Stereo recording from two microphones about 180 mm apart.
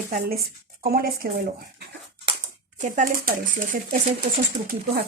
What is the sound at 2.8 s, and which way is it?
A woman's voice, 45° right (ahead or behind).